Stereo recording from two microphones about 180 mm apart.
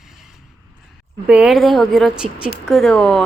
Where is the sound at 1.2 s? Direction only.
5° right (ahead or behind).